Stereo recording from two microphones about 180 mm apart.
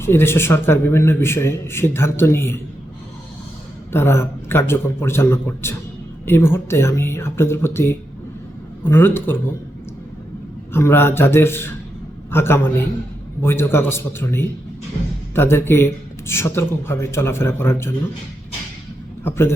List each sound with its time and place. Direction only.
0.0 s speech: 15° left (ahead or behind)
3.9 s speech: 15° left (ahead or behind)
10.7 s speech: 15° left (ahead or behind)
19.2 s speech: 15° left (ahead or behind)